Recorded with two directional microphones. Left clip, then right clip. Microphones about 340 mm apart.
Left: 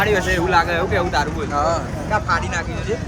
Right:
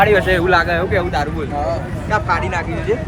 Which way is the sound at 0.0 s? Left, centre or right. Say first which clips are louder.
Right 5 dB; centre.